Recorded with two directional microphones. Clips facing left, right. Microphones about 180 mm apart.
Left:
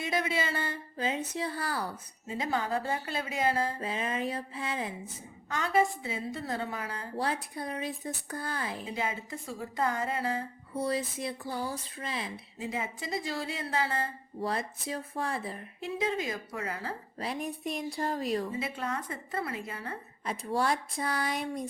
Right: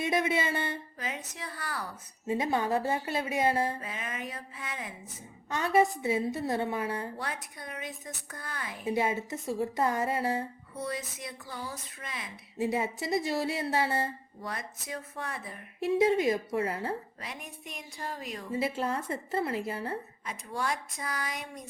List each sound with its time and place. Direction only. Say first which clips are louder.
0.0 s speech: right 3 dB; 25° right (ahead or behind)
0.9 s a woman's voice: left 7 dB; 30° left (ahead or behind)
2.2 s a woman's voice: right 3 dB; 25° right (ahead or behind)
3.8 s a woman's voice: left 6 dB; 30° left (ahead or behind)
5.5 s a woman's voice: right 2 dB; 25° right (ahead or behind)
7.2 s speech: left 6 dB; 30° left (ahead or behind)
9.0 s a woman's voice: right 6 dB; 25° right (ahead or behind)
10.8 s a woman's voice: left 5 dB; 30° left (ahead or behind)
12.6 s a woman's voice: right 6 dB; 25° right (ahead or behind)
14.4 s a woman's voice: left 6 dB; 30° left (ahead or behind)
16.0 s a woman's voice: right 7 dB; 25° right (ahead or behind)
17.2 s speech: left 8 dB; 35° left (ahead or behind)
18.8 s a woman's voice: right 3 dB; 30° right (ahead or behind)
20.2 s speech: left 6 dB; 35° left (ahead or behind)